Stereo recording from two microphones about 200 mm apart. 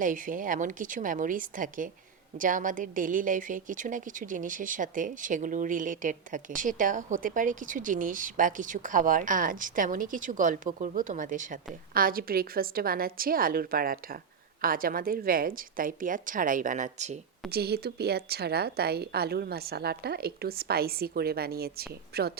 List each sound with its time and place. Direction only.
0.0 s a woman's voice: 40° right (ahead or behind)
17.5 s a woman's voice: 55° right (ahead or behind)